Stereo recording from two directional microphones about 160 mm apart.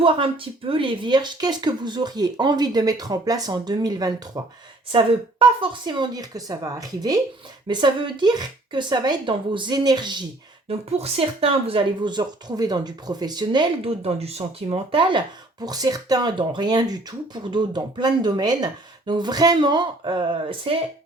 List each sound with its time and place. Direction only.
0.7 s speech: 30° right (ahead or behind)
4.9 s speech: 30° right (ahead or behind)
10.7 s speech: 40° right (ahead or behind)